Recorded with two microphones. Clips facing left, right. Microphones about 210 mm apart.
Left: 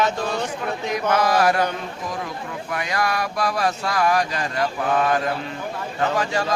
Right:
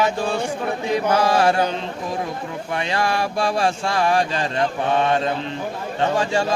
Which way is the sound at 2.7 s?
30° right (ahead or behind).